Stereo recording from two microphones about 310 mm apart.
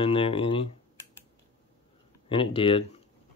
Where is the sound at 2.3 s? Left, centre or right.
Centre.